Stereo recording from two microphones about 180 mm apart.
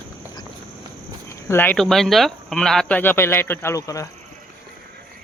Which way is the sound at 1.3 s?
15° left (ahead or behind).